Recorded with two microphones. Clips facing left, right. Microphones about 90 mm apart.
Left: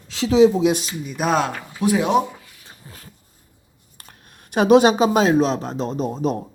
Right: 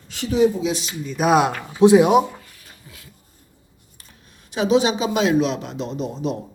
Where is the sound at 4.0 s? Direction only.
60° left (ahead or behind).